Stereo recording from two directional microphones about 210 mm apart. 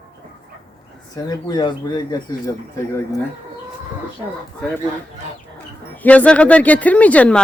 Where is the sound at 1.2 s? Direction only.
20° left (ahead or behind).